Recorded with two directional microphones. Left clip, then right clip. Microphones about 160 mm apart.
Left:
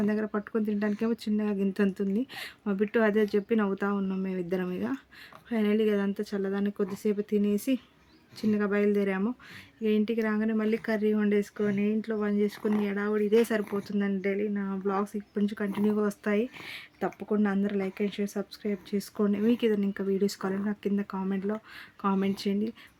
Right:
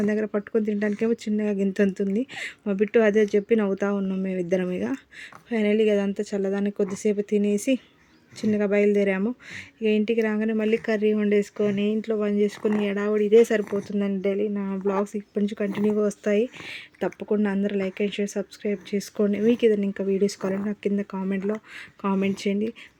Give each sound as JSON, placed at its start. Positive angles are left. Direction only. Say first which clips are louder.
{"t": 0.0, "sound": "speech", "louder": "right 5 dB", "side_deg": -20}
{"t": 13.8, "sound": "speech", "louder": "right 4 dB", "side_deg": -10}
{"t": 14.5, "sound": "speech", "louder": "right 5 dB", "side_deg": -20}